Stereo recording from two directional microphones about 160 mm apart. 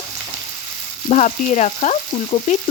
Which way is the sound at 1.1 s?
50° left (ahead or behind).